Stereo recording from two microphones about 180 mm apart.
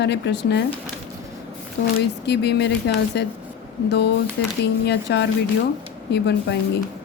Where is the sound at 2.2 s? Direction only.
65° left (ahead or behind).